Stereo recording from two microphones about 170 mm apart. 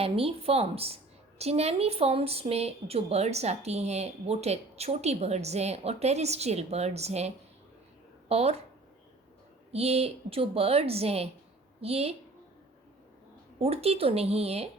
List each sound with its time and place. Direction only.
0.0 s a woman's voice: 35° right (ahead or behind)
9.7 s a woman's voice: 35° right (ahead or behind)
13.6 s a woman's voice: 35° right (ahead or behind)